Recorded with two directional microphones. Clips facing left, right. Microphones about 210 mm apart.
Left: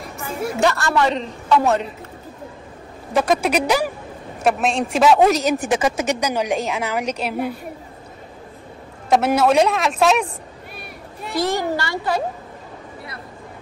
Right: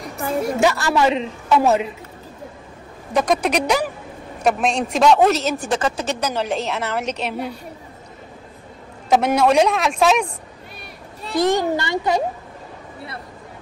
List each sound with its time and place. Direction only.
0.6 s a man's voice: 5° right (ahead or behind)
3.1 s a woman's voice: 5° left (ahead or behind)
9.1 s a man's voice: 5° left (ahead or behind)
11.3 s a child's voice: 20° right (ahead or behind)